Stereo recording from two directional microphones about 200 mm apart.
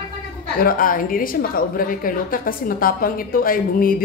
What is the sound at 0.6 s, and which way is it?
A woman's voice, 45° left (ahead or behind).